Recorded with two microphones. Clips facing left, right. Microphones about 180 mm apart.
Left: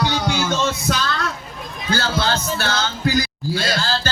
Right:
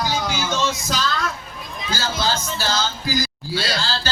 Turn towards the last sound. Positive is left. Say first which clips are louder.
# left 3 dB
turn(degrees=50)  # may be behind; listen again after turning